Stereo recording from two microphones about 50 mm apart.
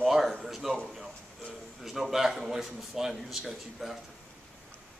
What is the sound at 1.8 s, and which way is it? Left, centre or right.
A man's voice, centre.